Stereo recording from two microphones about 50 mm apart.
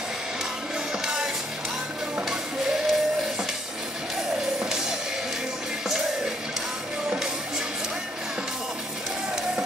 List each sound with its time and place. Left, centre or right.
1.0 s music: centre
4.4 s music: centre